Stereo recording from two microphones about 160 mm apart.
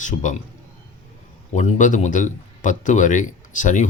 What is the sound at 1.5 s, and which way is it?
A man's voice, 50° left (ahead or behind).